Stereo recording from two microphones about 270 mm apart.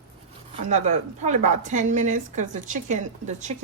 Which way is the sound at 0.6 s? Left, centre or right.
Right.